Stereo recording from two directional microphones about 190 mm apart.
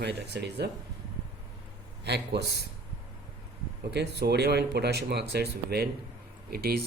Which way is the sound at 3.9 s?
60° right (ahead or behind).